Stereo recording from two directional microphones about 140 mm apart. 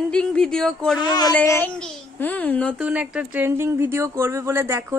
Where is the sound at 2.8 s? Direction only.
10° right (ahead or behind).